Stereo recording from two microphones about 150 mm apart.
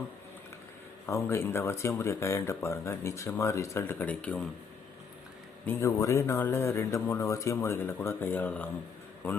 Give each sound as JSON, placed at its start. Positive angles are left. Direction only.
{"t": 1.0, "sound": "speech", "side_deg": 20}
{"t": 5.6, "sound": "speech", "side_deg": 20}